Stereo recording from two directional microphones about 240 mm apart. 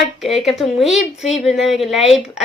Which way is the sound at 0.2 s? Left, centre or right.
Centre.